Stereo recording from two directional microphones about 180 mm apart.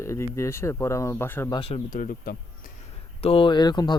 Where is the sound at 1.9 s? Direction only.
50° left (ahead or behind).